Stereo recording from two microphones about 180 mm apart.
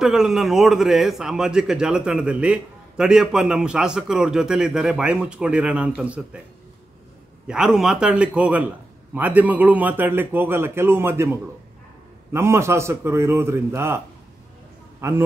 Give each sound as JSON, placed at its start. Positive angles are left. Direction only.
{"t": 0.0, "sound": "a man's voice", "side_deg": -5}
{"t": 7.4, "sound": "a man's voice", "side_deg": -5}
{"t": 15.0, "sound": "a man's voice", "side_deg": -15}